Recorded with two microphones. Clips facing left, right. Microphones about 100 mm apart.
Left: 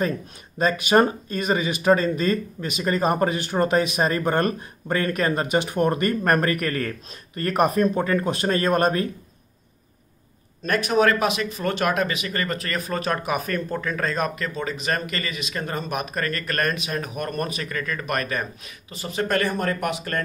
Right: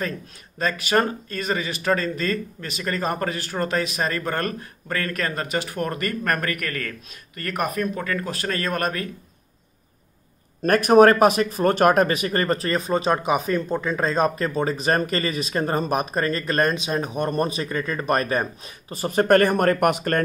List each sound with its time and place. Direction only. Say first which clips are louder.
0.6 s speech: left 3 dB; 20° left (ahead or behind)
10.6 s speech: right 6 dB; 50° right (ahead or behind)